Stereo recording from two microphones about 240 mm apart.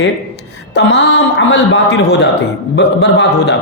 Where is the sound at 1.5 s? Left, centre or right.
Left.